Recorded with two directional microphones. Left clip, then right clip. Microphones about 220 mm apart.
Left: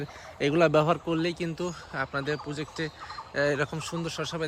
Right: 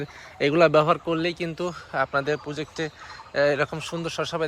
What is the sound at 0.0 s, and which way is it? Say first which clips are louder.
Speech: right 4 dB; 5° left (ahead or behind).